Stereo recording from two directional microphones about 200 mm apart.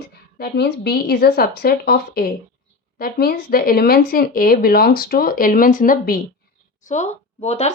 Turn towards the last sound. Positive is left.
turn(degrees=30)  # may be behind; listen again after turning